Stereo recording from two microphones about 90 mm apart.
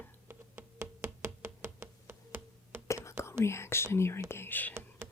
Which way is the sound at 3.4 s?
30° left (ahead or behind).